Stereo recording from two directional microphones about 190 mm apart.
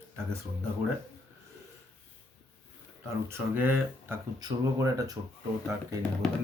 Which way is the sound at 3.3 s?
10° right (ahead or behind).